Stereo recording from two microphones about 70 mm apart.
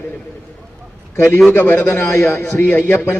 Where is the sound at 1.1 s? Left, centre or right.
Left.